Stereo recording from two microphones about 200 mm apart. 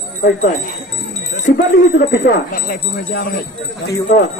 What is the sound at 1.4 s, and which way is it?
Speech, 65° left (ahead or behind).